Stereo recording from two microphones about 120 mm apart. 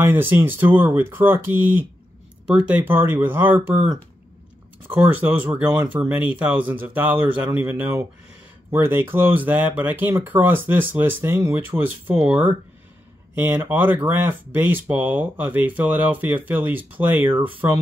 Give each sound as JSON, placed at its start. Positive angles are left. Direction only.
{"t": 0.0, "sound": "speech", "side_deg": -15}